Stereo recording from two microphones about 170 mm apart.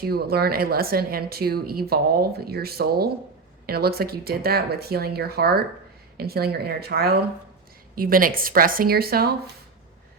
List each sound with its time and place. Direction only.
0.0 s a woman's voice: 65° right (ahead or behind)